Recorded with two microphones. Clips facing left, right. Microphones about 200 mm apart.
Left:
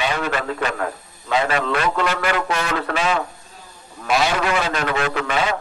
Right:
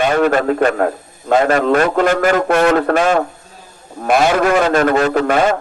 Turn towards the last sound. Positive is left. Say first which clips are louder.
# right 8 dB
turn(degrees=-50)  # may be behind; listen again after turning